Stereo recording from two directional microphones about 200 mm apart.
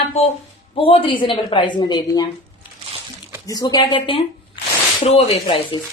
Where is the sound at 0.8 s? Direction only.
25° left (ahead or behind).